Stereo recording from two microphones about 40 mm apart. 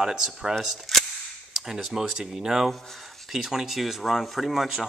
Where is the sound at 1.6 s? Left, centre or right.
Centre.